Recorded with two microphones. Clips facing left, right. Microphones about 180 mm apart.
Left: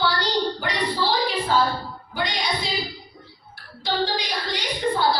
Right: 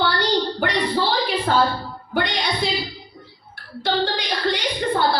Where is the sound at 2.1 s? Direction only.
60° right (ahead or behind).